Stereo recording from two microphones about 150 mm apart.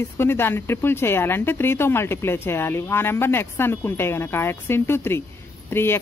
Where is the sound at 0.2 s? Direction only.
15° left (ahead or behind).